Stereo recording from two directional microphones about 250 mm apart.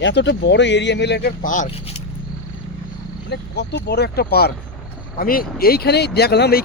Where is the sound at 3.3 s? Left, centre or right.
Left.